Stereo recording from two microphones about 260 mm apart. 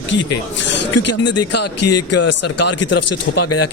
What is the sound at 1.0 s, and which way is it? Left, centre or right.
A man's voice, left.